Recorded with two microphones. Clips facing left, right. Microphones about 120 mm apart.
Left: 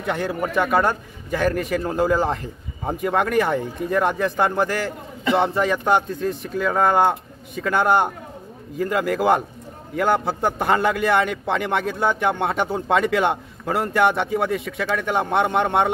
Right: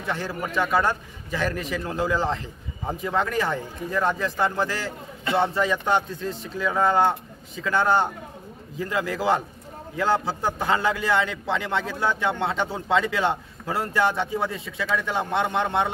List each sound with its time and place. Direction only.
0.0 s a man's voice: 60° left (ahead or behind)